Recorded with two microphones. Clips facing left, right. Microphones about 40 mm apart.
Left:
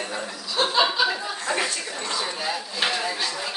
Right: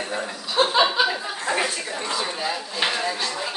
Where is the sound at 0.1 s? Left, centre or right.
Right.